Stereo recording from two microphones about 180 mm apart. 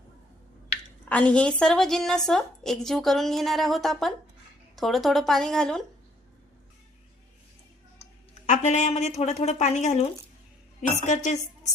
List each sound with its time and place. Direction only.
1.0 s a woman's voice: 5° left (ahead or behind)
8.4 s a woman's voice: 40° left (ahead or behind)
11.0 s a woman's voice: 40° left (ahead or behind)